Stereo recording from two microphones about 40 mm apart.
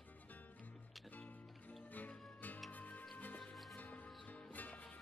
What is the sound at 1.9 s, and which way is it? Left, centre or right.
Music, left.